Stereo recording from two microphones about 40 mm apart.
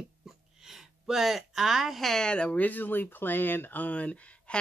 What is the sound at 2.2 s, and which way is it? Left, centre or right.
Speech, left.